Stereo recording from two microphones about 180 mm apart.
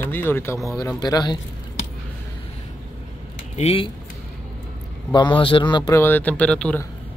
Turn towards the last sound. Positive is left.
turn(degrees=10)  # may be behind; listen again after turning